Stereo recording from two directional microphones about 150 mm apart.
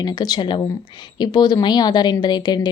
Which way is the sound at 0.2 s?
25° left (ahead or behind).